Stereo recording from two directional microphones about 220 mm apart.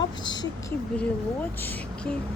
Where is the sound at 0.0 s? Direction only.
20° left (ahead or behind).